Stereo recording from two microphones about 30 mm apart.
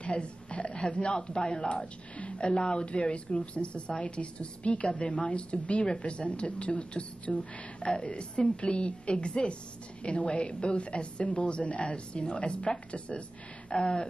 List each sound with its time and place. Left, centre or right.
0.0 s a sound: left
1.0 s a woman's voice: left
13.7 s a woman's voice: left